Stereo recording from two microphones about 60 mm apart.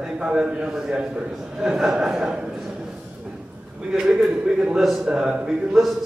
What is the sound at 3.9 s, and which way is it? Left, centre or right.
A man's voice, centre.